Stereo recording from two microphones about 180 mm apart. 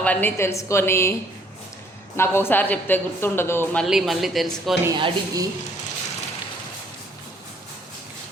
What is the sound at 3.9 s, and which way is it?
Speech, centre (ahead or behind).